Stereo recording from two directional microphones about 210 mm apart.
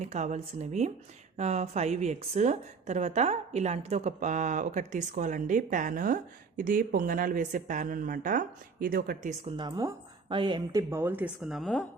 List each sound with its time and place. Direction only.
0.0 s a woman's voice: 35° right (ahead or behind)
9.4 s a woman's voice: 20° right (ahead or behind); by 11.9 s centre (ahead or behind)